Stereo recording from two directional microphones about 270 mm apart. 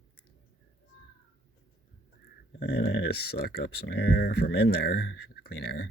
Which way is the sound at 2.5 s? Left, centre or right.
Left.